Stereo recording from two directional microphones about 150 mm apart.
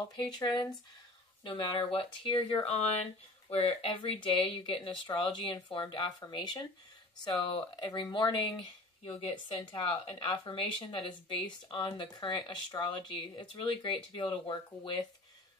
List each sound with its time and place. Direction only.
0.1 s speech: 30° left (ahead or behind)